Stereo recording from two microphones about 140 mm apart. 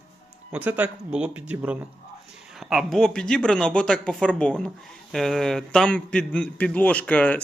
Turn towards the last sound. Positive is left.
turn(degrees=10)  # may be behind; listen again after turning